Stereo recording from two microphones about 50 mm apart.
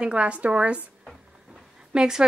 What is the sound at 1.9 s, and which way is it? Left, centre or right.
Speech, centre.